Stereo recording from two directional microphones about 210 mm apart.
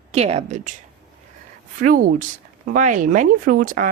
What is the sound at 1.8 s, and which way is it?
Speech, 40° right (ahead or behind).